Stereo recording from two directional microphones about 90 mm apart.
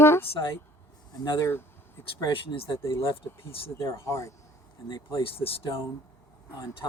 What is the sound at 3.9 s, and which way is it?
Speech, 35° left (ahead or behind).